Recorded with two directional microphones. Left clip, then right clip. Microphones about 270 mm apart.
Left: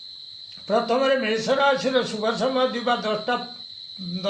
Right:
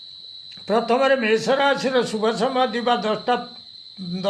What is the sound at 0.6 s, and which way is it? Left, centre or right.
Speech, right.